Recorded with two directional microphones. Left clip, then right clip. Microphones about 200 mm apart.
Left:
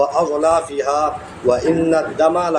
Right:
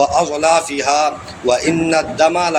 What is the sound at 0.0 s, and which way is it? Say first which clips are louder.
A man's voice: right 2 dB; 15° right (ahead or behind).